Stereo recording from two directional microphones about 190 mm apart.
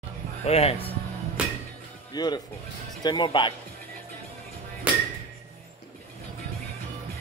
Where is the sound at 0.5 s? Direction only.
30° left (ahead or behind).